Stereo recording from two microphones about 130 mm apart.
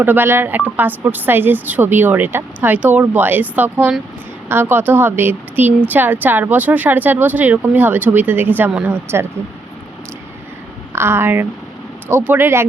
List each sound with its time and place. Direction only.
0.0 s speech: 15° right (ahead or behind)
10.9 s speech: 20° right (ahead or behind)